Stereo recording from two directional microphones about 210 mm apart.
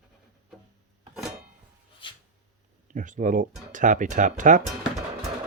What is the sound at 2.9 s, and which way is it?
Speech, 40° right (ahead or behind).